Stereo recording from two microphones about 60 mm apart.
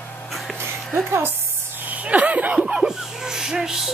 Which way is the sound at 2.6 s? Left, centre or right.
Centre.